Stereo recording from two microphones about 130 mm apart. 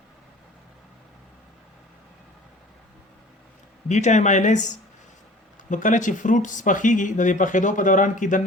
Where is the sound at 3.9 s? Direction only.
65° left (ahead or behind).